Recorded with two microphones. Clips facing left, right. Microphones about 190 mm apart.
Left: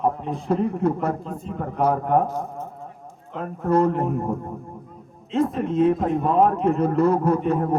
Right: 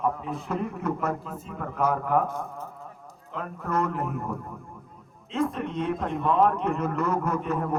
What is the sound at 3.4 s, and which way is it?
A man's voice, 35° left (ahead or behind).